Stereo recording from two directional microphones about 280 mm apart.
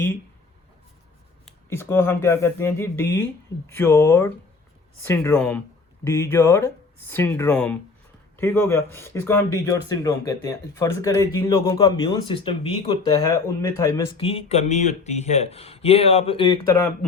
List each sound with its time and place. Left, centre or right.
1.5 s speech: centre